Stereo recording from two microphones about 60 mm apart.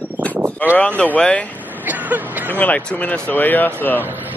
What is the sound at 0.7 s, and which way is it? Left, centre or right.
Speech, left.